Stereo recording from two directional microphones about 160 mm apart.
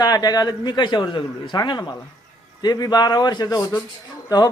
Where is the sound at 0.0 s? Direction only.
25° left (ahead or behind).